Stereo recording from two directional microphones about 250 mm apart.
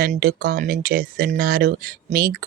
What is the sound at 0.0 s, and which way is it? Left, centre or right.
Speech, right.